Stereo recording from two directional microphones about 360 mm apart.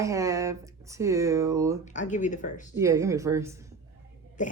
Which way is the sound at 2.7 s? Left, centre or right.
Centre.